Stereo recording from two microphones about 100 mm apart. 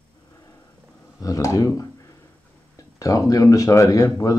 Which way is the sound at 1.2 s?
35° left (ahead or behind).